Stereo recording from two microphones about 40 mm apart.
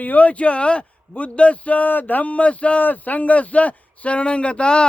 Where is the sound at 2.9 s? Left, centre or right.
Left.